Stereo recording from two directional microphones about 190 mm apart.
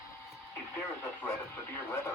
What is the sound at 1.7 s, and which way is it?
Speech, 15° left (ahead or behind).